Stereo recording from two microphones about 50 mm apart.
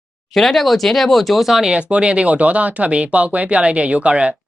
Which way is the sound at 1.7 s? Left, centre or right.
Right.